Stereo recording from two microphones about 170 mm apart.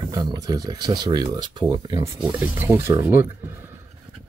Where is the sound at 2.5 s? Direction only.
15° right (ahead or behind).